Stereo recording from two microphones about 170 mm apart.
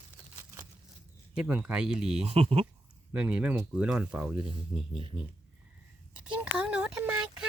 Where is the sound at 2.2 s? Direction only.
35° right (ahead or behind).